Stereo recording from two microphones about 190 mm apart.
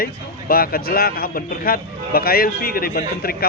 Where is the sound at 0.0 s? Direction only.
50° left (ahead or behind).